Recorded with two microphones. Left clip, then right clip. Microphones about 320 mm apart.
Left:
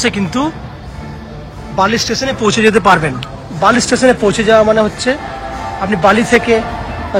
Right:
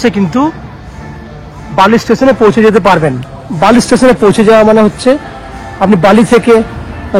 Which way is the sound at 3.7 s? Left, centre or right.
Centre.